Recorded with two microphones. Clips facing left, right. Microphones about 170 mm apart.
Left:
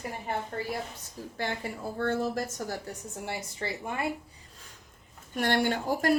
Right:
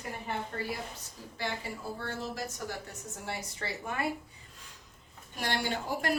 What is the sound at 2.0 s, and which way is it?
Speech, 55° left (ahead or behind).